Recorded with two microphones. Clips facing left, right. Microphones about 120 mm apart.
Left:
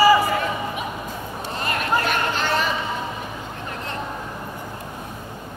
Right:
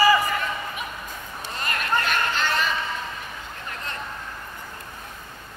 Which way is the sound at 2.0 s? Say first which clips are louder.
Left 2 dB; 20° left (ahead or behind).